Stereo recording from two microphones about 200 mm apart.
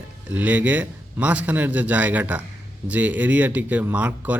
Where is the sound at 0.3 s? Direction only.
10° right (ahead or behind).